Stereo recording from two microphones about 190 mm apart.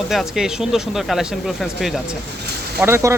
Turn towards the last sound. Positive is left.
turn(degrees=-15)  # may be behind; listen again after turning